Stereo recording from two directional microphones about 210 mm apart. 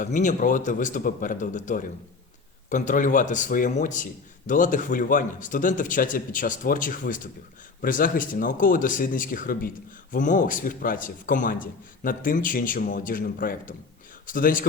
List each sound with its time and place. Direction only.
0.0 s speech: 35° left (ahead or behind)